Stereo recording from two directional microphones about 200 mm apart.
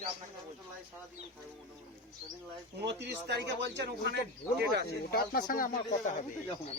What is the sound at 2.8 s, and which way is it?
Speech, 55° right (ahead or behind).